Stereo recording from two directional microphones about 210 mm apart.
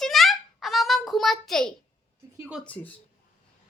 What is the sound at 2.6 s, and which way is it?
Speech, 5° left (ahead or behind).